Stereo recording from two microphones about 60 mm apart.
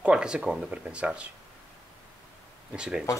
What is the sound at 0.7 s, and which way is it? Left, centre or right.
Speech, centre.